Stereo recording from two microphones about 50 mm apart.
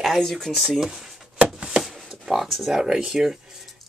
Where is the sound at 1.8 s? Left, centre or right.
Centre.